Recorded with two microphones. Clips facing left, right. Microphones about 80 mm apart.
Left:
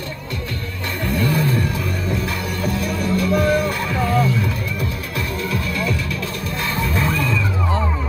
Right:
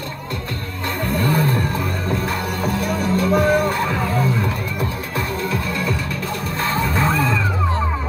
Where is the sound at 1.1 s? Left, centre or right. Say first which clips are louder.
Right 1 dB; right.